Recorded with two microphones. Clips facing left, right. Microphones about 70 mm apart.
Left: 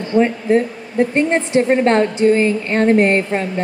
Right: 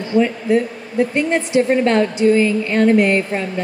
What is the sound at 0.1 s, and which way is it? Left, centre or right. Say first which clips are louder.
Speech: left 1 dB; left.